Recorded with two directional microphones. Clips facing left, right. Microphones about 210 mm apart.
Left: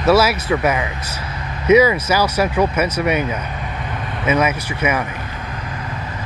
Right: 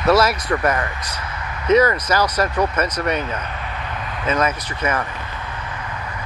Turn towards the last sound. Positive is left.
turn(degrees=10)  # may be behind; listen again after turning